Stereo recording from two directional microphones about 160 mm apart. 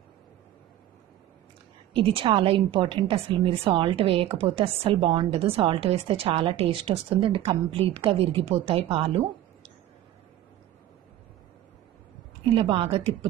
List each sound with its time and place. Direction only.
2.0 s a woman's voice: 35° right (ahead or behind)
12.5 s a woman's voice: 35° right (ahead or behind)